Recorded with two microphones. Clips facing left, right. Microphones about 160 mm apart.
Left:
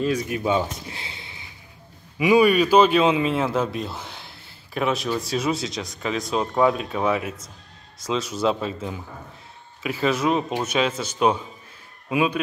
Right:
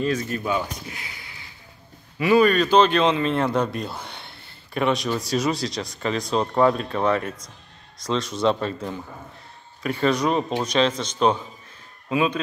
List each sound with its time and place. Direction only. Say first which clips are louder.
0.0 s speech: left 1 dB; 10° left (ahead or behind)
2.1 s speech: left 1 dB; 10° left (ahead or behind)